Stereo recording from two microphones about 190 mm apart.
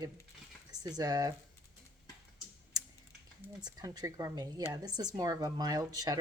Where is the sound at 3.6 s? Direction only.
20° right (ahead or behind).